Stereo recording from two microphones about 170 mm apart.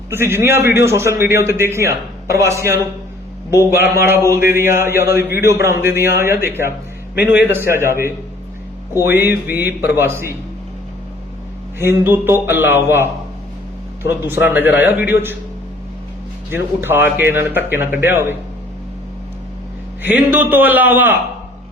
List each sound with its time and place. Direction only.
0.1 s a man's voice: 15° right (ahead or behind)
11.8 s a man's voice: 15° right (ahead or behind)
16.5 s a man's voice: 15° right (ahead or behind)
20.0 s a man's voice: 10° right (ahead or behind)